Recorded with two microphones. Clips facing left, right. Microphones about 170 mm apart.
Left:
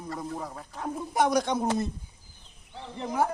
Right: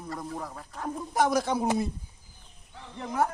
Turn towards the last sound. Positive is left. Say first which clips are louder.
# left 1 dB
turn(degrees=0)  # may be behind; listen again after turning